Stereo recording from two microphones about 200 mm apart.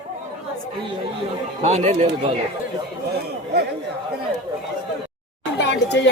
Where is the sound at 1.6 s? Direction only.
35° right (ahead or behind).